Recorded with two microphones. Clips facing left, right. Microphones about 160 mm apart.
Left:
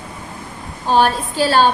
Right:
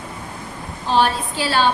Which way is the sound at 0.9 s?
45° left (ahead or behind).